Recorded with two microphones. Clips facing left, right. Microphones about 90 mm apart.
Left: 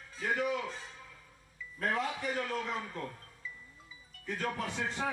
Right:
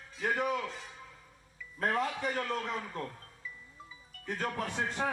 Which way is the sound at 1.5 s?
50° right (ahead or behind).